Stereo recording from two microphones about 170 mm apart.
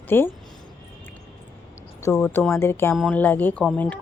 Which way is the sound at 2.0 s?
10° left (ahead or behind).